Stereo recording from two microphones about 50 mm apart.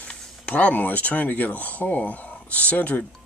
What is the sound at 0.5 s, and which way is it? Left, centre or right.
Speech, left.